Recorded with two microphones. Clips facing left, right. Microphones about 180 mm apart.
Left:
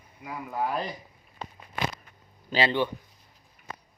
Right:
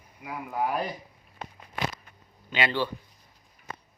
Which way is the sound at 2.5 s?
30° left (ahead or behind).